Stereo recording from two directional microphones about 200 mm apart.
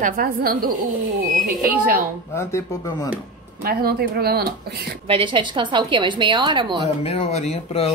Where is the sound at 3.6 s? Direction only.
50° right (ahead or behind).